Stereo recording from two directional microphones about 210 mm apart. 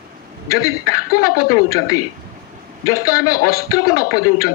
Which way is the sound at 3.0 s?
45° left (ahead or behind).